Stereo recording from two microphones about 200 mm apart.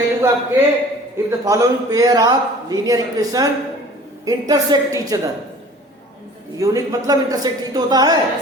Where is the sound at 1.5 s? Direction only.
15° right (ahead or behind).